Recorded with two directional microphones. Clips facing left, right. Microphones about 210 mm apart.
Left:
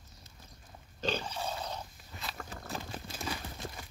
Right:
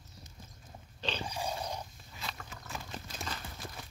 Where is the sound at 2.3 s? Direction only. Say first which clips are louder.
Left 4 dB; 40° left (ahead or behind).